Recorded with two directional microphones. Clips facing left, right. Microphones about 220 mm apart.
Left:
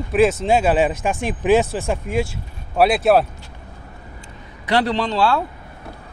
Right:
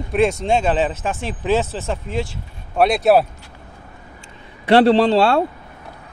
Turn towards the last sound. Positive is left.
turn(degrees=-25)  # may be behind; listen again after turning